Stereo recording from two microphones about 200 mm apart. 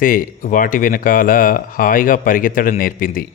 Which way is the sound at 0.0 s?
45° left (ahead or behind).